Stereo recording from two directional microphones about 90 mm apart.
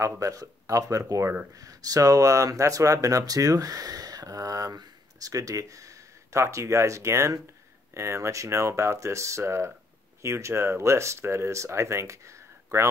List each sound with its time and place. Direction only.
0.2 s speech: 40° right (ahead or behind)